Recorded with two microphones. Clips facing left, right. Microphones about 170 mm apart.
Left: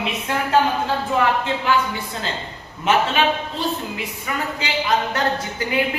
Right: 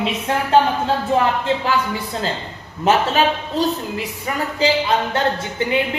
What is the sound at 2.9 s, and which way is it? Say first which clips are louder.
Speech: right 2 dB; 40° right (ahead or behind).